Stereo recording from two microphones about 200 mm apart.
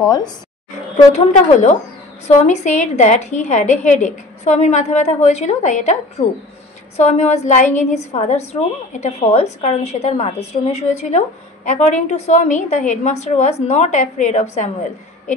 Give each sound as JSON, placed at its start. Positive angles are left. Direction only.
{"t": 0.7, "sound": "a woman's voice", "side_deg": 35}